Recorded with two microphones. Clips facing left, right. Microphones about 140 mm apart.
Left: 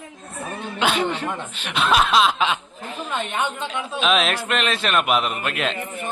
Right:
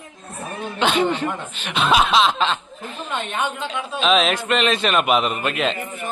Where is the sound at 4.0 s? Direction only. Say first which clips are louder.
Right 3 dB; centre (ahead or behind).